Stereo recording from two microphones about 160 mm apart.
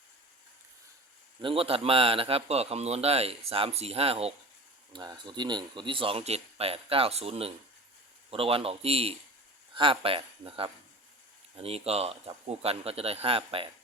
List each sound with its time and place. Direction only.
1.4 s speech: 35° right (ahead or behind)